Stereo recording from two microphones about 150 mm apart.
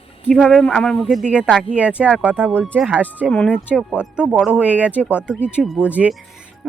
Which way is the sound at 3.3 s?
5° left (ahead or behind).